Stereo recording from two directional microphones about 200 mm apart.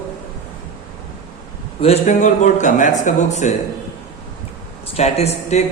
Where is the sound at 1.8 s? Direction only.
35° left (ahead or behind).